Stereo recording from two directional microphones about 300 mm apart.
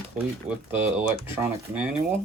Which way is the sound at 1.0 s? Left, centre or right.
Centre.